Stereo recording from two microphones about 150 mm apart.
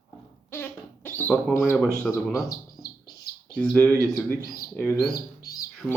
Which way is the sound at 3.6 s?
10° left (ahead or behind).